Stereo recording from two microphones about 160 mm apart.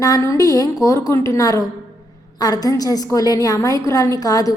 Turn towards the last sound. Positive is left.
turn(degrees=20)  # may be behind; listen again after turning